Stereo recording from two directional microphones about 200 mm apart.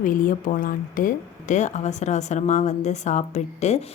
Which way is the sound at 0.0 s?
40° left (ahead or behind).